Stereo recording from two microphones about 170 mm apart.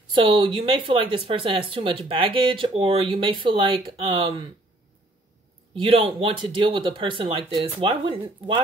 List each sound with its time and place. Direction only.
0.1 s speech: 30° right (ahead or behind)
5.8 s speech: 30° right (ahead or behind)